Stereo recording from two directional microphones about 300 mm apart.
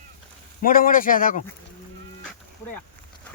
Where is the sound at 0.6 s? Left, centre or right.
Left.